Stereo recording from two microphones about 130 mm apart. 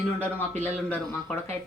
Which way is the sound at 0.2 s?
15° left (ahead or behind).